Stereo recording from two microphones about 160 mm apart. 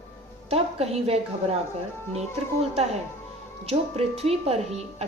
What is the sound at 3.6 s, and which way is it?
A woman's voice, 40° right (ahead or behind).